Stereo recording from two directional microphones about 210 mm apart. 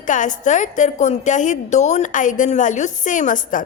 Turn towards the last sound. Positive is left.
turn(degrees=40)  # may be behind; listen again after turning